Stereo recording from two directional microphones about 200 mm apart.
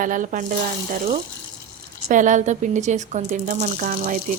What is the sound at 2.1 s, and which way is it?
Speech, 40° right (ahead or behind).